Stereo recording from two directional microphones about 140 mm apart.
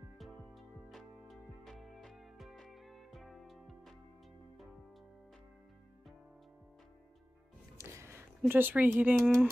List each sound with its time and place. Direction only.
0.2 s music: centre (ahead or behind)
7.7 s music: 20° right (ahead or behind)
8.4 s speech: 15° right (ahead or behind)
9.2 s speech: 5° right (ahead or behind)